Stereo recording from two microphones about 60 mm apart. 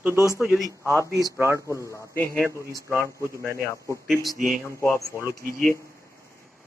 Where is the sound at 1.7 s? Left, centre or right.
Left.